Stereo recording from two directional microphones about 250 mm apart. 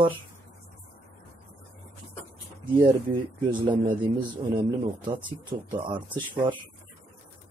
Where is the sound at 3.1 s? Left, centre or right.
Centre.